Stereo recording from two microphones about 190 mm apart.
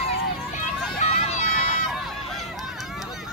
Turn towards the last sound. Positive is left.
turn(degrees=0)  # may be behind; listen again after turning